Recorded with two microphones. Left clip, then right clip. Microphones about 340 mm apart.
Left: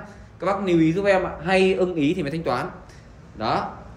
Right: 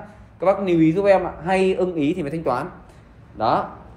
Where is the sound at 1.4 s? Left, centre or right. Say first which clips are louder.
Even; centre.